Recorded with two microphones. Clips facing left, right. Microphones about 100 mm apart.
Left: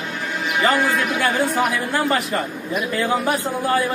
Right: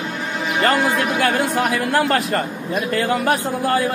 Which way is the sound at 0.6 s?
80° right.